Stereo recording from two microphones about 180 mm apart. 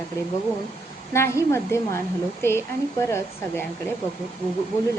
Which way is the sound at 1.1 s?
15° left (ahead or behind).